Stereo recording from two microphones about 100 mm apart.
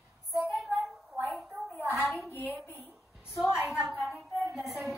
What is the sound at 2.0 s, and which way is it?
Speech, centre (ahead or behind).